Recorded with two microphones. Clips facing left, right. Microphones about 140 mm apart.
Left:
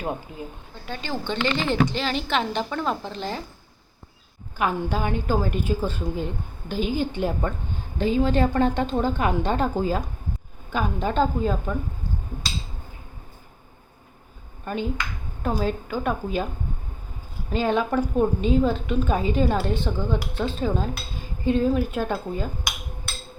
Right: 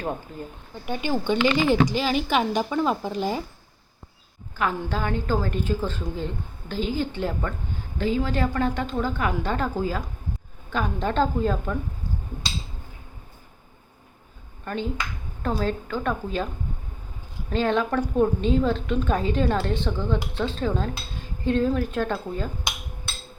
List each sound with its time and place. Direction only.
0.0 s a woman's voice: 5° left (ahead or behind)
0.9 s a woman's voice: 15° right (ahead or behind)
4.5 s a woman's voice: 15° left (ahead or behind)
10.7 s a woman's voice: 5° left (ahead or behind)
14.6 s a woman's voice: 10° left (ahead or behind)
17.5 s a woman's voice: 10° left (ahead or behind)